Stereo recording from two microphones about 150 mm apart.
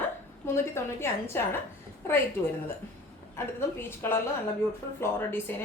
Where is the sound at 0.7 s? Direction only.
15° left (ahead or behind).